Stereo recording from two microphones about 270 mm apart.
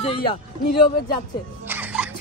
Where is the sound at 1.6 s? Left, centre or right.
Centre.